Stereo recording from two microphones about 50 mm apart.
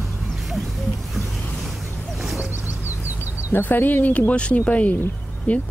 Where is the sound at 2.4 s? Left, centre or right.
Right.